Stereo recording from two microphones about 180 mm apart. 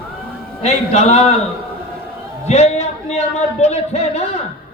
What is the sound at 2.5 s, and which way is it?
A man's voice, 40° left (ahead or behind).